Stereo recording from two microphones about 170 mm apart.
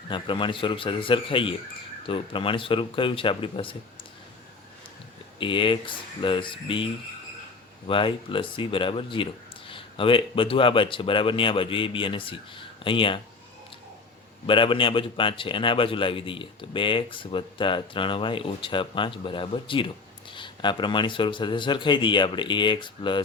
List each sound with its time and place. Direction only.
0.1 s a man's voice: 30° left (ahead or behind)
5.4 s a man's voice: 30° left (ahead or behind)
14.4 s a man's voice: 30° left (ahead or behind)